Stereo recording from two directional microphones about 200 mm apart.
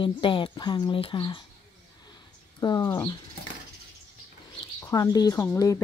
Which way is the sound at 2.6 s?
20° left (ahead or behind).